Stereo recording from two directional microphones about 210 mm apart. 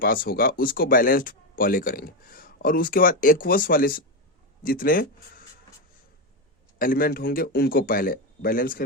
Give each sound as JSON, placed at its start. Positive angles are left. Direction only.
{"t": 0.0, "sound": "speech", "side_deg": 45}
{"t": 6.7, "sound": "speech", "side_deg": 45}